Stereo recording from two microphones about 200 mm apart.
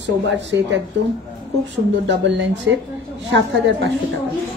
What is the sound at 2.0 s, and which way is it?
Speech, 65° right (ahead or behind).